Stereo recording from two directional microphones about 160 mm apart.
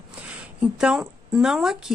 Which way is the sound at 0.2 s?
5° right (ahead or behind).